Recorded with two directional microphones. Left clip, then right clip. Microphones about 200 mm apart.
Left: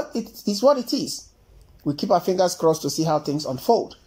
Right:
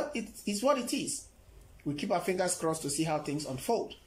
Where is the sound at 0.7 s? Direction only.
Centre (ahead or behind).